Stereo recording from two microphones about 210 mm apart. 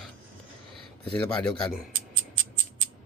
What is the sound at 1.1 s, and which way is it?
Speech, 5° left (ahead or behind).